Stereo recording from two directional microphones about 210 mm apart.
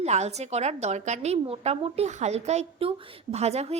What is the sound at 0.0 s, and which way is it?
A woman's voice, 30° right (ahead or behind).